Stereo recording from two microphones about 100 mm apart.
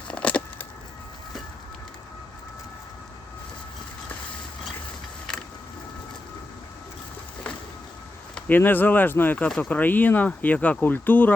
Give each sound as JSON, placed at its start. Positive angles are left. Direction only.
{"t": 0.1, "sound": "a sound", "side_deg": 15}
{"t": 5.3, "sound": "vehicle", "side_deg": 5}
{"t": 8.4, "sound": "speech", "side_deg": 20}